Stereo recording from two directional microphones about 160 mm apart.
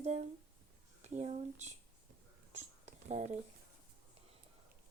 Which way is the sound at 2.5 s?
45° right (ahead or behind).